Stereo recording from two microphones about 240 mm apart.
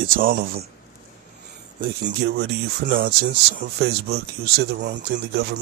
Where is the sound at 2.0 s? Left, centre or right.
Right.